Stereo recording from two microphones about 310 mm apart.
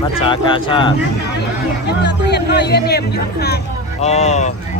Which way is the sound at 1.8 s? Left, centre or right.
Left.